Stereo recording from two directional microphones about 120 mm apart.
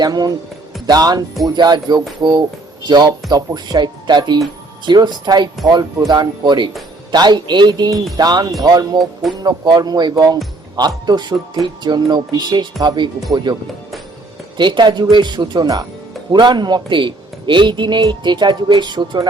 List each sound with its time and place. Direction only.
0.0 s a man's voice: 30° right (ahead or behind)